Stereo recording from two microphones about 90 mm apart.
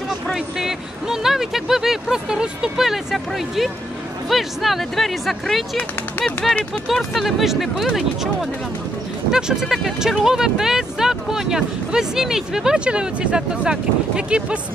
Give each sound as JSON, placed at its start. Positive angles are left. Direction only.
{"t": 0.3, "sound": "speech", "side_deg": -5}
{"t": 5.8, "sound": "speech", "side_deg": 15}
{"t": 6.9, "sound": "speech", "side_deg": 0}